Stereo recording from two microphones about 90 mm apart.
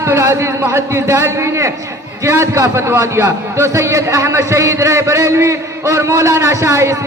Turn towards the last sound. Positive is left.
turn(degrees=-30)  # may be behind; listen again after turning